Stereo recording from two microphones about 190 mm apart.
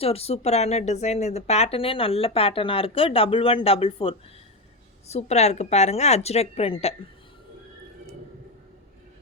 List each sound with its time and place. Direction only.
0.0 s speech: 30° left (ahead or behind)